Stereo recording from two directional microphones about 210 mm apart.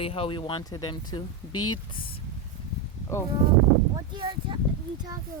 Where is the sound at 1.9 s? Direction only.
25° left (ahead or behind).